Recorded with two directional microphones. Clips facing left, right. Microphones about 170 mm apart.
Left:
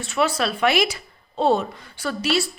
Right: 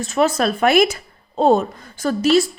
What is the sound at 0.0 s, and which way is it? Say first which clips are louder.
A woman's voice: right 5 dB; 40° right (ahead or behind).